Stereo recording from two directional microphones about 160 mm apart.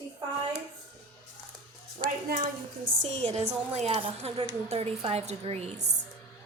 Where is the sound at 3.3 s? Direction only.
40° right (ahead or behind).